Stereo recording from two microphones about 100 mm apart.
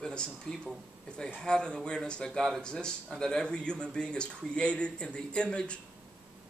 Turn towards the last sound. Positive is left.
turn(degrees=10)  # may be behind; listen again after turning